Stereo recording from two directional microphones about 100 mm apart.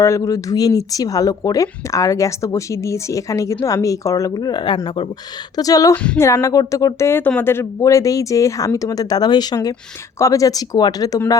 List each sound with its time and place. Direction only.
0.0 s speech: 30° left (ahead or behind); by 5.0 s 50° left (ahead or behind)
5.5 s speech: 35° left (ahead or behind)